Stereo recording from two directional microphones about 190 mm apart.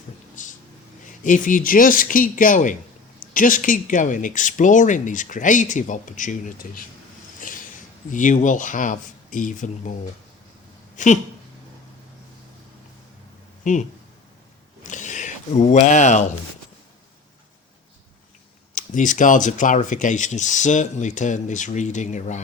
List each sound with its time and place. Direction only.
0.4 s a sound: 40° left (ahead or behind)
1.2 s speech: 45° left (ahead or behind)
7.3 s a sound: 45° left (ahead or behind)
8.1 s speech: 40° left (ahead or behind)
10.9 s speech: 40° left (ahead or behind)
13.7 s speech: 40° left (ahead or behind)
14.8 s speech: 40° left (ahead or behind)
18.7 s speech: 40° left (ahead or behind)